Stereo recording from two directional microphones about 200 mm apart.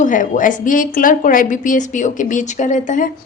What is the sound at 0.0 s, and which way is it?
A woman's voice, 40° left (ahead or behind).